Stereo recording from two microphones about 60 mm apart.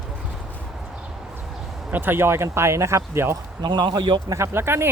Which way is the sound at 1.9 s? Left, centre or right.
Right.